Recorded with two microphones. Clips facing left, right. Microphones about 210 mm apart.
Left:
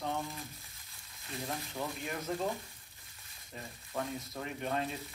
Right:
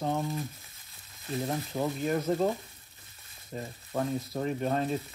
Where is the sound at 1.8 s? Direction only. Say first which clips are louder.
Right 11 dB; 45° right (ahead or behind).